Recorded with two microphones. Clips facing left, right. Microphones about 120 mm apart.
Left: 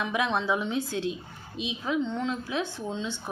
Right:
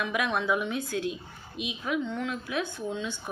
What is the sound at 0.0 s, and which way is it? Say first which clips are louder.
Speech: left 1 dB; 25° left (ahead or behind).